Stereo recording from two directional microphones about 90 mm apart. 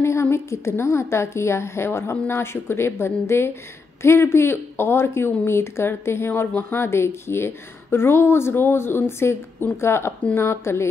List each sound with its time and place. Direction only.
0.0 s speech: 30° left (ahead or behind)